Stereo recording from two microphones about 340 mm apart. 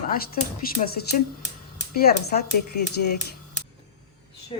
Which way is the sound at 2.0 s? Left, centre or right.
Left.